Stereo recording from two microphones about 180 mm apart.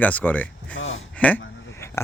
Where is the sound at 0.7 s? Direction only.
90° left.